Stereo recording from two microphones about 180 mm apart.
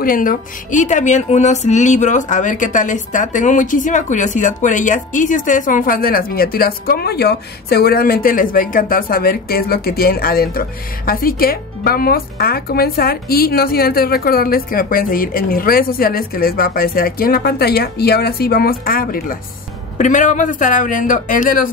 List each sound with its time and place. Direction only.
0.0 s speech: 50° left (ahead or behind)